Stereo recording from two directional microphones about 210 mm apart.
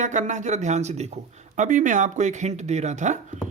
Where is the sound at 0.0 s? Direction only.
35° right (ahead or behind).